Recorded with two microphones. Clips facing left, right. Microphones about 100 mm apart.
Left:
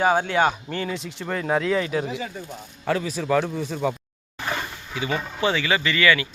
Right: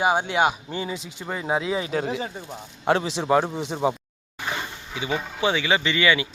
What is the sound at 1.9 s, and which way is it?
Speech, 45° right (ahead or behind).